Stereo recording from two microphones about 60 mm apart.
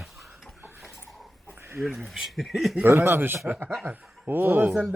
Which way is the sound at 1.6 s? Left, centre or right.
Right.